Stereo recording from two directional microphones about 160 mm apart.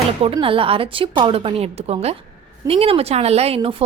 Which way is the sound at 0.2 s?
35° right (ahead or behind).